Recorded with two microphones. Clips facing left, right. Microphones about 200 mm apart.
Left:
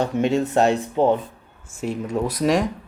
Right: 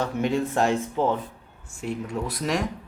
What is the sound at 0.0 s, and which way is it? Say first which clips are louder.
Speech: left 4 dB; 25° left (ahead or behind).